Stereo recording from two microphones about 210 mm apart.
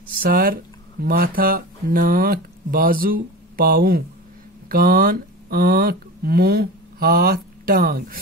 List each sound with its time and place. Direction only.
0.1 s speech: 45° right (ahead or behind)